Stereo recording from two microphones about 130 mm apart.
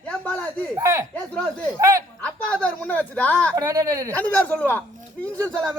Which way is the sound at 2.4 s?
10° left (ahead or behind).